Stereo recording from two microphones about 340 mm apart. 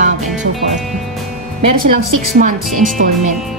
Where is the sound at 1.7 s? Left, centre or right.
Right.